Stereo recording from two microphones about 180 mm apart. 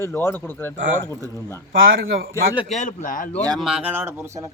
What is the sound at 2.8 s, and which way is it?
Speech, 45° left (ahead or behind).